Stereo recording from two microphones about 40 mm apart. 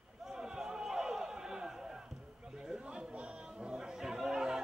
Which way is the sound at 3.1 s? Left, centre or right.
Right.